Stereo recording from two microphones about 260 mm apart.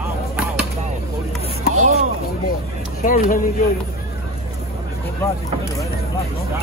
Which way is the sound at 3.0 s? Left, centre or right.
Left.